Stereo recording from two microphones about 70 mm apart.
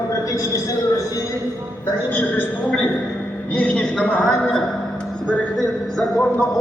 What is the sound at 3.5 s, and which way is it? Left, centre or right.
Speech, left.